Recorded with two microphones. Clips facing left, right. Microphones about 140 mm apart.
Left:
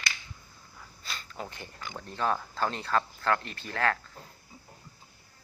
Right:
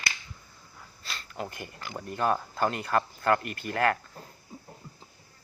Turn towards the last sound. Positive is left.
turn(degrees=-10)  # may be behind; listen again after turning